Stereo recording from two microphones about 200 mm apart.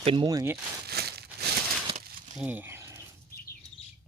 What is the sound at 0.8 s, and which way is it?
Crumpling, 50° right (ahead or behind).